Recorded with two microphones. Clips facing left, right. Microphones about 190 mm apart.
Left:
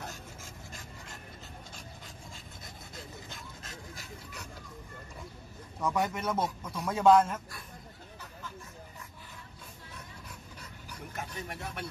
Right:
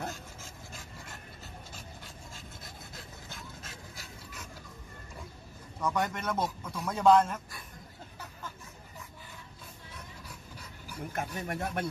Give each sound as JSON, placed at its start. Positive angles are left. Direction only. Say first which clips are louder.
{"t": 3.3, "sound": "dog", "louder": "even", "side_deg": -5}
{"t": 5.8, "sound": "speech", "louder": "left 1 dB", "side_deg": 5}
{"t": 11.1, "sound": "speech", "louder": "right 5 dB", "side_deg": -55}